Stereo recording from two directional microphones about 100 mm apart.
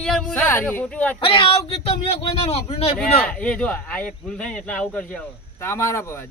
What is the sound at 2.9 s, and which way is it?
Speech, 10° left (ahead or behind).